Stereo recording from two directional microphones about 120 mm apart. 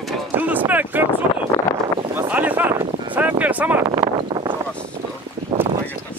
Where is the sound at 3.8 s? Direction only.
35° right (ahead or behind).